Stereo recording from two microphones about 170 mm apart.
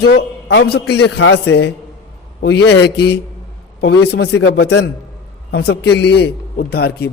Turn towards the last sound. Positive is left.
turn(degrees=70)  # may be behind; listen again after turning